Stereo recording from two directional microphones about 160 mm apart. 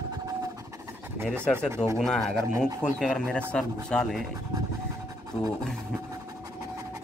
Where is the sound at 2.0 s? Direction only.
Centre (ahead or behind).